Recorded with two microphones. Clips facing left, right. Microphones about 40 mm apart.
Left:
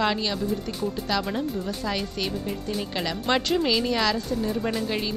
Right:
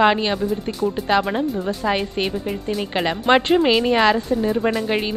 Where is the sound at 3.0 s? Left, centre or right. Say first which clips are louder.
Right 9 dB; right.